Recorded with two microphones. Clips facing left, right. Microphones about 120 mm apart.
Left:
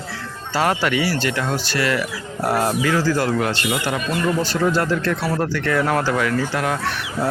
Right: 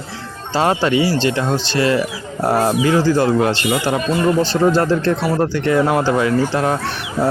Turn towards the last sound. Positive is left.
turn(degrees=-30)  # may be behind; listen again after turning